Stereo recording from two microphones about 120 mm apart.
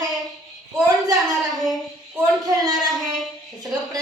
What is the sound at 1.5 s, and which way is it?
Child singing, centre (ahead or behind).